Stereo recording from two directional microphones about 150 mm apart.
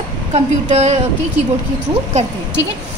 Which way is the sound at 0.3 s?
45° right (ahead or behind).